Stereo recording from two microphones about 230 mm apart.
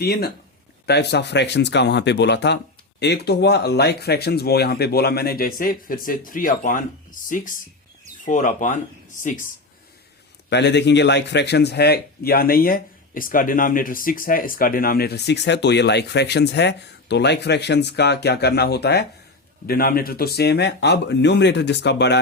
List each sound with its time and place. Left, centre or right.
0.0 s a man's voice: left
10.5 s a man's voice: left